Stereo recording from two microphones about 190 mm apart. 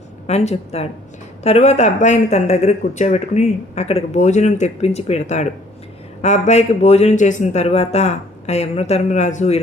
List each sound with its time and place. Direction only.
0.3 s speech: 35° left (ahead or behind)